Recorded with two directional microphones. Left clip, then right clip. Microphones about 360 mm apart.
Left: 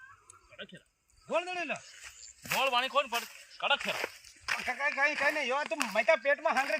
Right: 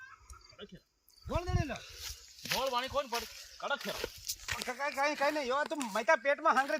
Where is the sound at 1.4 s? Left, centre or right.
Centre.